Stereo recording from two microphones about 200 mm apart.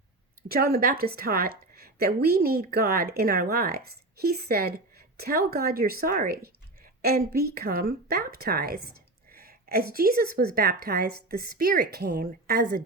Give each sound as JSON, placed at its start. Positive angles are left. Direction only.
{"t": 0.4, "sound": "a woman's voice", "side_deg": -50}